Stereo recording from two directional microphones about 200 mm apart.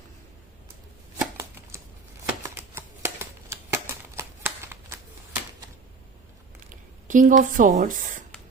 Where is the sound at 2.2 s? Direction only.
10° right (ahead or behind).